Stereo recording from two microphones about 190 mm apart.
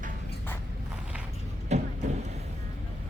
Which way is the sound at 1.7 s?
35° right (ahead or behind).